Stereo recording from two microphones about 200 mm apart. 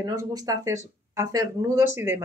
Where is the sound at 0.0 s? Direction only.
15° right (ahead or behind).